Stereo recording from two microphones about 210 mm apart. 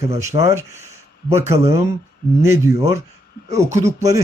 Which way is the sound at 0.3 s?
25° right (ahead or behind).